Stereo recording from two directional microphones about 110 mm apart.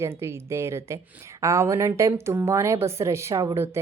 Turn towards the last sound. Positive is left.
turn(degrees=-25)  # may be behind; listen again after turning